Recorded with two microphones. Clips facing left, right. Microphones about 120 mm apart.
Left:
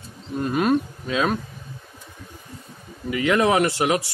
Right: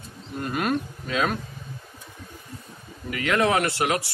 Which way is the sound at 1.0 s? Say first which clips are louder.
Left 2 dB; 20° left (ahead or behind).